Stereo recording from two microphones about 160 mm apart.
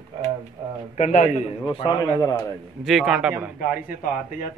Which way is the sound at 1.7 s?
30° left (ahead or behind).